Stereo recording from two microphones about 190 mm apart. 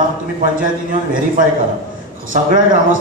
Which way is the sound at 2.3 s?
45° right (ahead or behind).